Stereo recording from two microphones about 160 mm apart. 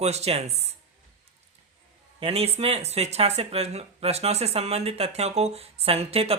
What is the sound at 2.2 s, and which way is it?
Speech, 40° right (ahead or behind).